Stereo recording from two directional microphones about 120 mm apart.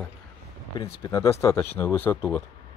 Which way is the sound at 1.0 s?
25° left (ahead or behind).